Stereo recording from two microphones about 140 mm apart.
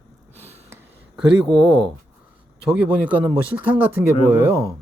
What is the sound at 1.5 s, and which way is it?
Speech, 30° right (ahead or behind).